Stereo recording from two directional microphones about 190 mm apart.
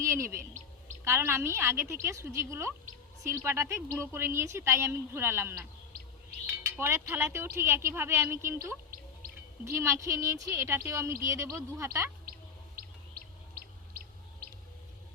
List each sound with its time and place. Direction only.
0.0 s a woman's voice: 15° right (ahead or behind)
5.9 s chirp: 50° right (ahead or behind)
6.4 s a woman's voice: 10° right (ahead or behind)
9.2 s music: 50° right (ahead or behind)
9.6 s a woman's voice: 15° right (ahead or behind)
12.8 s chirp: 50° right (ahead or behind)